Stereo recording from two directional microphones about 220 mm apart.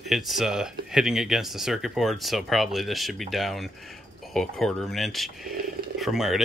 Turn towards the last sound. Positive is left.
turn(degrees=0)  # may be behind; listen again after turning